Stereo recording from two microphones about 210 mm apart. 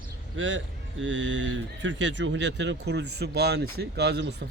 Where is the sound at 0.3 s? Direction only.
65° right (ahead or behind).